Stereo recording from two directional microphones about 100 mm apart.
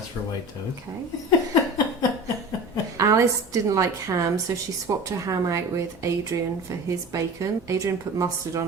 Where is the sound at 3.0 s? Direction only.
35° right (ahead or behind).